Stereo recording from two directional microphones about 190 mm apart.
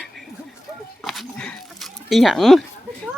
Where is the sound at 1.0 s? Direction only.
Centre (ahead or behind).